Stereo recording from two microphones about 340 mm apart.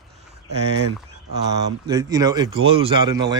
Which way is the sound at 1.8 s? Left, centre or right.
Centre.